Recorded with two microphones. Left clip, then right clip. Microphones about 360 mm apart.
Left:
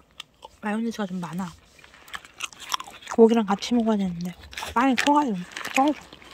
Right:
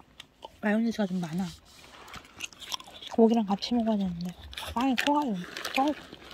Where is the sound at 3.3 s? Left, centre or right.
Centre.